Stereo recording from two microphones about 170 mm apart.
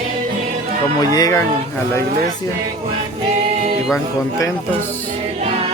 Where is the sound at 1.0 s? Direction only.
20° left (ahead or behind).